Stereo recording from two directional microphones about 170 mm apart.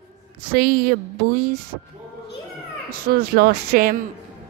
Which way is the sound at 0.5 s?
60° right (ahead or behind).